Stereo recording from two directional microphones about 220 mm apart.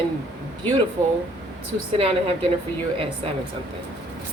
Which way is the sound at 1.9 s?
25° right (ahead or behind).